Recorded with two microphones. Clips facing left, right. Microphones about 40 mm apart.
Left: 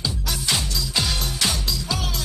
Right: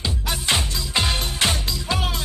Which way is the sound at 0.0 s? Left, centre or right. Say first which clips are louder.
Right 1 dB; right.